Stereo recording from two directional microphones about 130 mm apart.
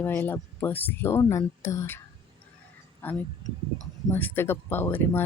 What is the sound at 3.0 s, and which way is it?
Speech, 15° left (ahead or behind).